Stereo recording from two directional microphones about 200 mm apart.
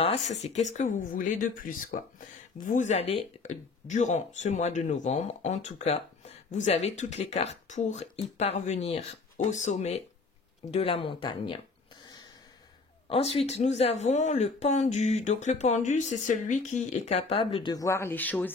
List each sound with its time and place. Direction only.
0.0 s speech: 35° left (ahead or behind)
13.1 s speech: 30° left (ahead or behind); by 18.5 s 10° left (ahead or behind)